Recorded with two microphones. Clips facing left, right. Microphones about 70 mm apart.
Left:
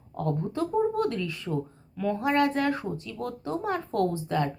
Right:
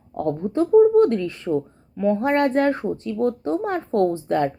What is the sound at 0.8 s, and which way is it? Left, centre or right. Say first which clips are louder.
Speech: right 12 dB; right.